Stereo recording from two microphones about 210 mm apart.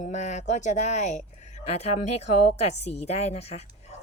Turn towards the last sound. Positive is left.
turn(degrees=30)  # may be behind; listen again after turning